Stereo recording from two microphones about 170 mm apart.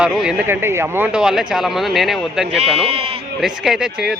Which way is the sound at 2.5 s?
35° right (ahead or behind).